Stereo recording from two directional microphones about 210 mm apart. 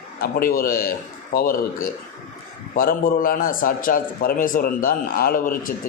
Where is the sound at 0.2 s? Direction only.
45° left (ahead or behind).